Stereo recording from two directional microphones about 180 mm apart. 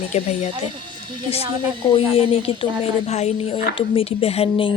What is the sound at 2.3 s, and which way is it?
Speech, 30° left (ahead or behind).